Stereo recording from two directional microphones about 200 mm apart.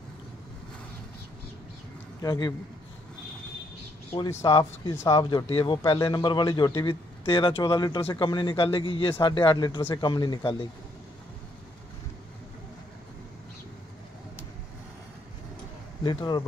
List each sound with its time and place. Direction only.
2.2 s a man's voice: 20° left (ahead or behind)
4.1 s a man's voice: 15° left (ahead or behind)
16.0 s a man's voice: 20° left (ahead or behind)